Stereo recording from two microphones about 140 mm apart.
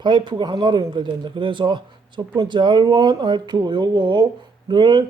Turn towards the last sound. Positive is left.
turn(degrees=-35)  # may be behind; listen again after turning